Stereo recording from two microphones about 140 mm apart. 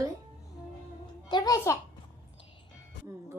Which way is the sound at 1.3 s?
25° left (ahead or behind).